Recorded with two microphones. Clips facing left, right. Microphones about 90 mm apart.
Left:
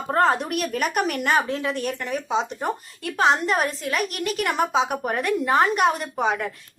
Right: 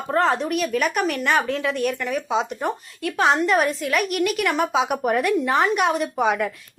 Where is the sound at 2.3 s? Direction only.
Centre (ahead or behind).